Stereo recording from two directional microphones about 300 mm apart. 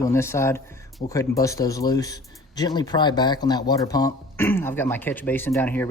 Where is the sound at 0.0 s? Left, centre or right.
Centre.